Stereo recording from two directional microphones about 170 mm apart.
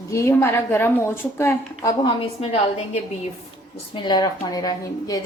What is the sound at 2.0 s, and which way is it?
Speech, 35° left (ahead or behind).